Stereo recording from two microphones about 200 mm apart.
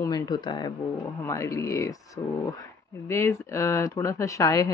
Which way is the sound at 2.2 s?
25° left (ahead or behind).